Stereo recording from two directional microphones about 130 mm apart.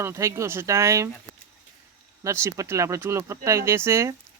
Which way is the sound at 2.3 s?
20° right (ahead or behind).